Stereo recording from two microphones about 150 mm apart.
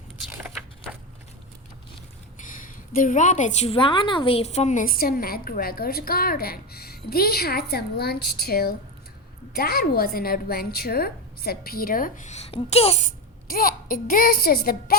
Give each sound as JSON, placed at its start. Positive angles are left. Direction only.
{"t": 2.4, "sound": "a woman's voice", "side_deg": 60}
{"t": 13.1, "sound": "speech", "side_deg": 70}